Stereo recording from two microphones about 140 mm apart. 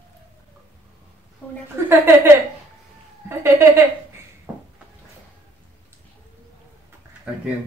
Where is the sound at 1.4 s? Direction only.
10° left (ahead or behind).